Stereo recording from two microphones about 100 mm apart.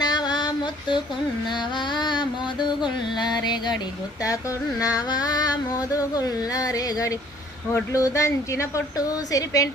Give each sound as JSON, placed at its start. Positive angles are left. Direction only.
{"t": 0.0, "sound": "female singing", "side_deg": 45}
{"t": 1.5, "sound": "music", "side_deg": 50}
{"t": 4.2, "sound": "a sound", "side_deg": 35}